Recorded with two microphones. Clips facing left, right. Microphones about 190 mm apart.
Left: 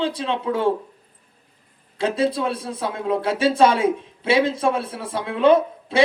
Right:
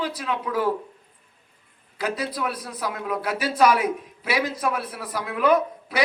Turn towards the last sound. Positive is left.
turn(degrees=25)  # may be behind; listen again after turning